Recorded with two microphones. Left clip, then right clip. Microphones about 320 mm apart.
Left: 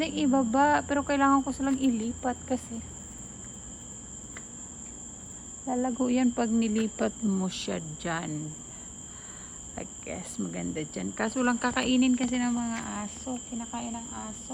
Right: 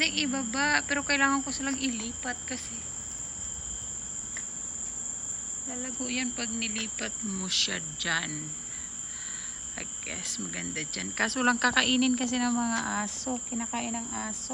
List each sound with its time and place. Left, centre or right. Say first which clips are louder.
0.0 s cricket: left 1 dB; centre
5.8 s cricket: left 6 dB; centre
7.3 s cricket: right 5 dB; centre
9.7 s cricket: left 1 dB; centre